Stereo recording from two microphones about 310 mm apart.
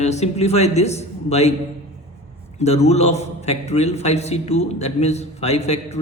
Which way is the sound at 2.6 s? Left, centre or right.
Centre.